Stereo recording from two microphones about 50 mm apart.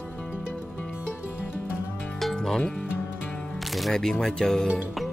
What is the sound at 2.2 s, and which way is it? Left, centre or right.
Music, centre.